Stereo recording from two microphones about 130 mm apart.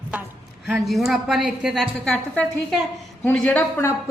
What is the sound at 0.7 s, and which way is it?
A woman's voice, centre (ahead or behind).